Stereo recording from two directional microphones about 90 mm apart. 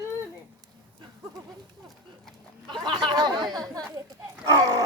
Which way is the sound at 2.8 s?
55° right (ahead or behind).